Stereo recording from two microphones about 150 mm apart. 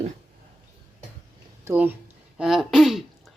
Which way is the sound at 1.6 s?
10° right (ahead or behind).